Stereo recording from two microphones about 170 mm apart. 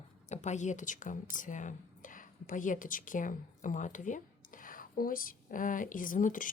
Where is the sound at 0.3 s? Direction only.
45° left (ahead or behind).